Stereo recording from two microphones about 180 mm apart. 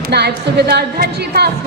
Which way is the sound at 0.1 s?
65° right (ahead or behind).